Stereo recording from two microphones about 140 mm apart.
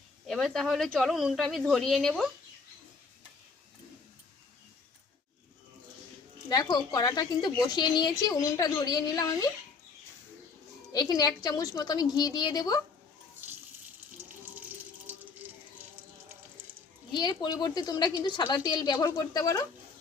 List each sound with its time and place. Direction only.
0.3 s speech: centre (ahead or behind)
6.5 s a woman's voice: 30° left (ahead or behind)
10.9 s a woman's voice: 30° left (ahead or behind)
15.4 s a sound: 10° right (ahead or behind)
17.1 s a woman's voice: 35° left (ahead or behind)